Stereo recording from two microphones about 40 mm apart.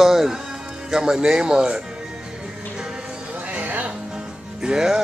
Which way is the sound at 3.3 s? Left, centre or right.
Right.